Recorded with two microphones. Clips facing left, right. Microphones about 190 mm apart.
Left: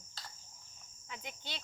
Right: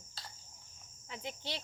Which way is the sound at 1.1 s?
30° right (ahead or behind).